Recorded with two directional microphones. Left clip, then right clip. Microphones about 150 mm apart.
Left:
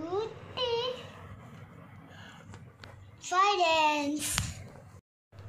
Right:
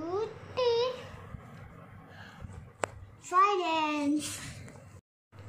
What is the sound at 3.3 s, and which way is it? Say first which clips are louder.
A child's voice: left 1 dB; 60° left (ahead or behind).